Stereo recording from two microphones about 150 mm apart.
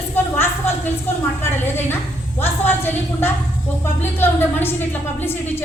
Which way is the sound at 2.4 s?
15° left (ahead or behind).